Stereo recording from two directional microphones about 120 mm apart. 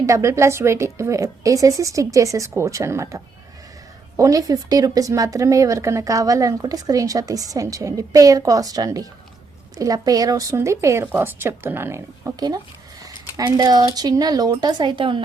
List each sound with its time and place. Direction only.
0.0 s speech: 25° right (ahead or behind)
4.2 s a woman's voice: 30° right (ahead or behind)